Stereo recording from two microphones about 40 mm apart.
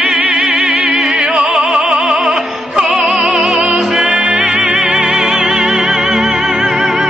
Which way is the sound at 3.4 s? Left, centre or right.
Right.